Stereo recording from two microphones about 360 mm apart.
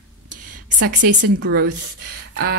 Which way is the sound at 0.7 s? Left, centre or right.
Right.